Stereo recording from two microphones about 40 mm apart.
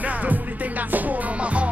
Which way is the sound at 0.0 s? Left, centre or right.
Right.